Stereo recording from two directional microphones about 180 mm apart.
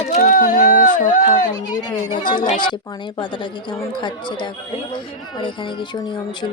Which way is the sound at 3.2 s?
25° left (ahead or behind).